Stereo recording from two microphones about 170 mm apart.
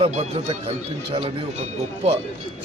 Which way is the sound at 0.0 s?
40° right (ahead or behind).